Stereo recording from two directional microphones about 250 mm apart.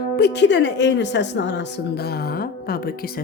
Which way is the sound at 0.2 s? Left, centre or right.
Left.